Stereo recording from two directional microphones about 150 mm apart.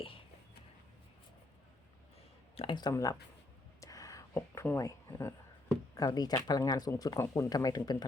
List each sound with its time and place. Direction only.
2.6 s speech: 30° left (ahead or behind)
3.8 s a sound: 20° left (ahead or behind)
5.9 s speech: 25° left (ahead or behind)